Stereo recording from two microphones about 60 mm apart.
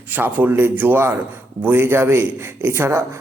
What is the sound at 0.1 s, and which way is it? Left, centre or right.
A man's voice, right.